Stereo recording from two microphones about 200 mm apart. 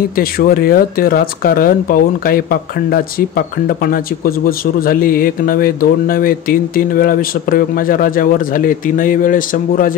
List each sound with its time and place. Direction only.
0.1 s speech: 45° left (ahead or behind)